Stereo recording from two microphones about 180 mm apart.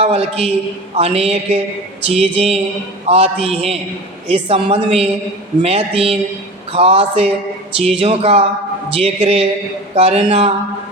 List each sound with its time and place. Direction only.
0.0 s a woman's voice: 35° right (ahead or behind)